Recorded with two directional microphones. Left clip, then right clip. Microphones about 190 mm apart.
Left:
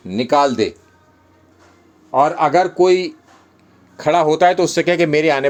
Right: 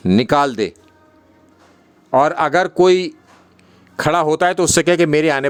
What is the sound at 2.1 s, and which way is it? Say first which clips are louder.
A man's voice: even; 50° right (ahead or behind).